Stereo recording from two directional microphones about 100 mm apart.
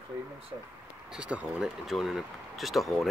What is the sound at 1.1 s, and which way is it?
Speech, 10° right (ahead or behind).